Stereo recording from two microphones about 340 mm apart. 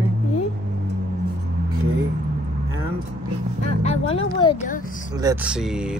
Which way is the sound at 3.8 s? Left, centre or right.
Centre.